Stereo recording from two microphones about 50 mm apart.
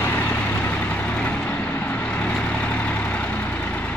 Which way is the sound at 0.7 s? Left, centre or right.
Left.